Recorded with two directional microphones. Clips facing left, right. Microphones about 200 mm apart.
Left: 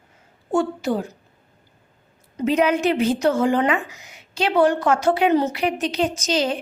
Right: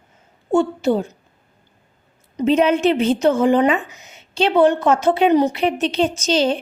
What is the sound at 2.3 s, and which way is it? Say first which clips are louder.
A woman's voice: right 3 dB; 25° right (ahead or behind).